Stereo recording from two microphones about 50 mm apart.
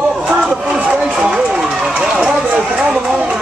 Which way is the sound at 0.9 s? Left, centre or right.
Centre.